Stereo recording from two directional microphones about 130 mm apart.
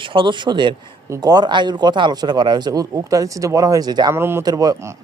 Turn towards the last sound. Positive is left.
turn(degrees=-30)  # may be behind; listen again after turning